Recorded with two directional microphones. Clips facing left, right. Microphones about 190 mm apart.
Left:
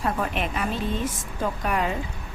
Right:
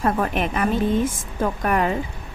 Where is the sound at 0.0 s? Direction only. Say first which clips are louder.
Right 5 dB; 55° right (ahead or behind).